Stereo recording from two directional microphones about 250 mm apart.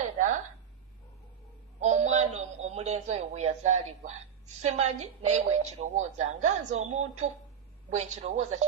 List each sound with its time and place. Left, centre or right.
0.0 s a sound: right
1.8 s music: right
4.6 s speech: right